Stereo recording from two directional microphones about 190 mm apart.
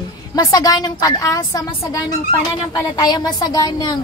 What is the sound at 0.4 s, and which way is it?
A woman's voice, 20° left (ahead or behind).